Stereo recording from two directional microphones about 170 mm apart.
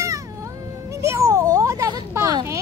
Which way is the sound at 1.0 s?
15° right (ahead or behind).